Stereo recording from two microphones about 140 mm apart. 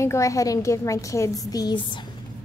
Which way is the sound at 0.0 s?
20° left (ahead or behind).